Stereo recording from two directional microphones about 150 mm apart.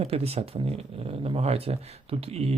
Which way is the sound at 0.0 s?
40° right (ahead or behind).